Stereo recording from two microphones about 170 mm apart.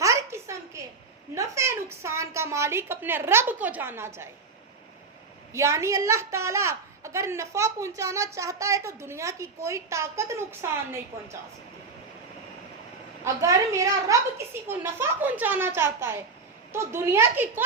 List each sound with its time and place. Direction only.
0.0 s a sound: 20° right (ahead or behind)
1.4 s a woman's voice: 15° right (ahead or behind)
5.5 s a woman's voice: 15° right (ahead or behind)
13.2 s a woman's voice: 20° right (ahead or behind)